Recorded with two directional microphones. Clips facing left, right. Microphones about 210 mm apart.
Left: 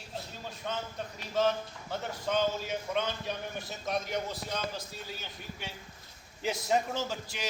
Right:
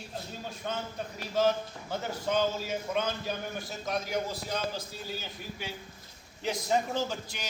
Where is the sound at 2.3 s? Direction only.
5° right (ahead or behind).